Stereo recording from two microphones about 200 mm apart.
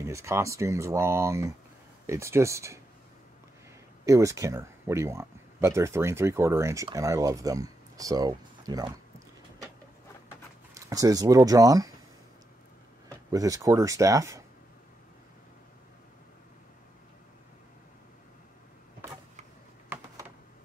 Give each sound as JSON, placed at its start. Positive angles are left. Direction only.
{"t": 0.0, "sound": "speech", "side_deg": -15}
{"t": 4.0, "sound": "speech", "side_deg": -15}
{"t": 10.7, "sound": "speech", "side_deg": -15}
{"t": 13.3, "sound": "speech", "side_deg": -15}
{"t": 19.9, "sound": "a sound", "side_deg": -10}